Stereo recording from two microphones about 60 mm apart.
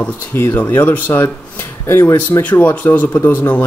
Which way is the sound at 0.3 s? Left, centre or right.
Left.